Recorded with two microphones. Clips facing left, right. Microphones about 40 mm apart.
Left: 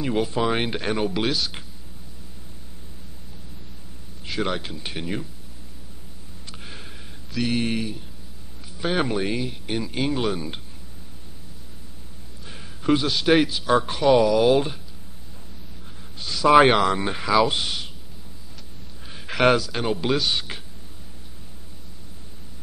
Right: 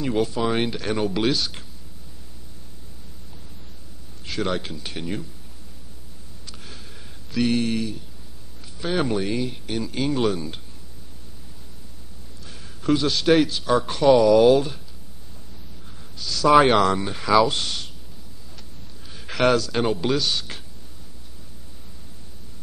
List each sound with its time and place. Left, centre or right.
0.0 s a man's voice: centre
0.7 s speech: left
0.9 s speech: centre
4.2 s speech: centre
6.4 s a sound: left
7.2 s a sound: centre
7.5 s a man's voice: centre
12.6 s a sound: centre
13.0 s a man's voice: centre
16.3 s a man's voice: centre
17.3 s speech: centre
19.3 s a sound: centre
19.6 s a man's voice: centre